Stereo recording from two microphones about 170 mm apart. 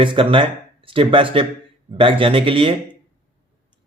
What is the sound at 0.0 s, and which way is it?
Speech, 30° right (ahead or behind).